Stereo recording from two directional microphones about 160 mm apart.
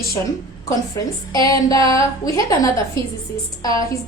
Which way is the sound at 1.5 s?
20° left (ahead or behind).